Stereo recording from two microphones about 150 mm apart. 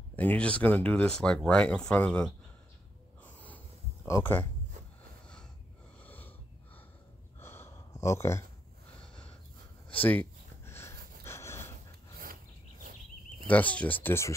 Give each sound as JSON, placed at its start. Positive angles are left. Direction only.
{"t": 0.1, "sound": "speech", "side_deg": 10}
{"t": 3.3, "sound": "a sound", "side_deg": 10}
{"t": 4.1, "sound": "speech", "side_deg": 15}
{"t": 5.9, "sound": "wheeze", "side_deg": 10}
{"t": 7.3, "sound": "gasp", "side_deg": 15}
{"t": 9.8, "sound": "a sound", "side_deg": 10}
{"t": 13.5, "sound": "speech", "side_deg": 10}